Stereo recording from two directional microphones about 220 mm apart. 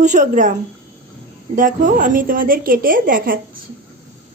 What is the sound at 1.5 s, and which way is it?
A woman's voice, 35° right (ahead or behind).